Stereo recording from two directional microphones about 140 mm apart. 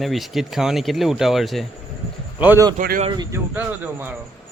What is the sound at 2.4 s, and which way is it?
Speech, 15° right (ahead or behind).